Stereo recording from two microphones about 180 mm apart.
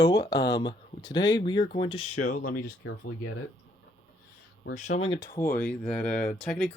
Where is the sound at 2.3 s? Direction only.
50° left (ahead or behind).